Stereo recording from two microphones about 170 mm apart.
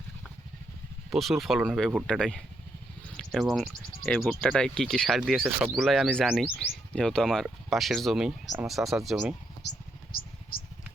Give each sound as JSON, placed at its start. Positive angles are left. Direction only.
{"t": 1.1, "sound": "speech", "side_deg": 0}
{"t": 10.1, "sound": "vehicle", "side_deg": 60}